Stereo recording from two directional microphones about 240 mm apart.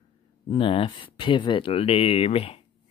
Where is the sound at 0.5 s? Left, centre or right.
Left.